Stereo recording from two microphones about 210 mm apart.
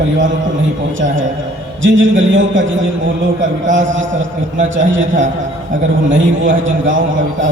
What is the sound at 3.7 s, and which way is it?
A man's voice, 65° right (ahead or behind).